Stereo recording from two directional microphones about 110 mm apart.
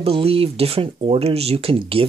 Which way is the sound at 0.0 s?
60° right (ahead or behind).